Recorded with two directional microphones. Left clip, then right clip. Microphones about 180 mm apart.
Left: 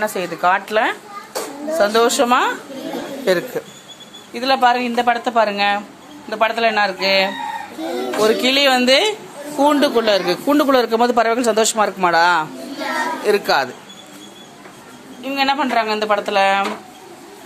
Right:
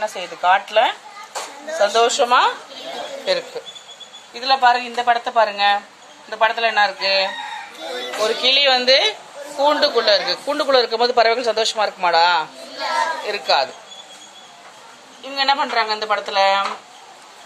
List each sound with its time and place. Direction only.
0.0 s a man's voice: 15° left (ahead or behind)
4.3 s a man's voice: 15° left (ahead or behind)
7.8 s speech: 55° right (ahead or behind)
8.2 s a woman's voice: 5° left (ahead or behind)
15.2 s a man's voice: 15° left (ahead or behind)